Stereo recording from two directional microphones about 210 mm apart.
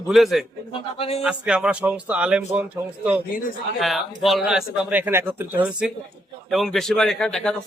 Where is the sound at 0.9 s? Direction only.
25° left (ahead or behind).